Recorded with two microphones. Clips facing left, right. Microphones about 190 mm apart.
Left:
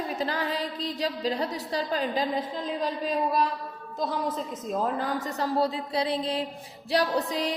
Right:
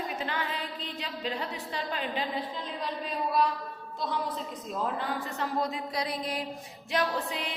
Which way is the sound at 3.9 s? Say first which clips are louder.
Left 4 dB; 45° left (ahead or behind).